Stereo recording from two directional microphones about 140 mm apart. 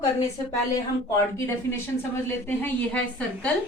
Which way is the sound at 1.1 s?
20° left (ahead or behind).